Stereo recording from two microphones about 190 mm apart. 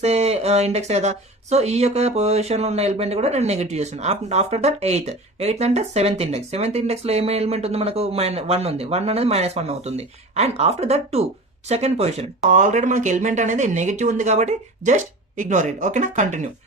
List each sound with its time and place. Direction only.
0.0 s speech: 35° right (ahead or behind)